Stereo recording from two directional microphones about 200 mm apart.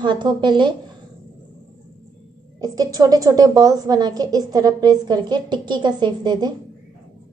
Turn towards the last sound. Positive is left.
turn(degrees=-20)  # may be behind; listen again after turning